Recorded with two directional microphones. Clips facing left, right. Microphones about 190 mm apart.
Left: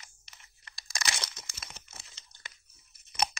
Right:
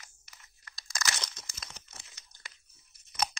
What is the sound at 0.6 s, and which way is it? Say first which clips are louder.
Crunch: even; 25° left (ahead or behind).